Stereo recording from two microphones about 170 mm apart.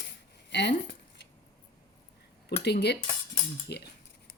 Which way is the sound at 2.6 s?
75° left (ahead or behind).